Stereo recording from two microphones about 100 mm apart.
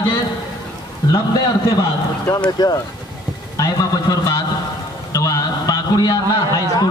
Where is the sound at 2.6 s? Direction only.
45° left (ahead or behind).